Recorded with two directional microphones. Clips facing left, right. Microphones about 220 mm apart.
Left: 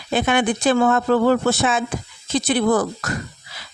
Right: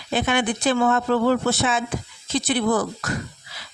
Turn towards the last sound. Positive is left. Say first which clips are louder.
# left 3 dB
turn(degrees=45)  # may be behind; listen again after turning